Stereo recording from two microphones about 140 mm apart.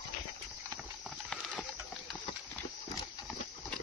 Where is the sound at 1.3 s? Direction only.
Centre (ahead or behind).